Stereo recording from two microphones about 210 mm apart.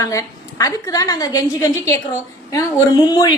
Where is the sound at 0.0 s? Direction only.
15° left (ahead or behind).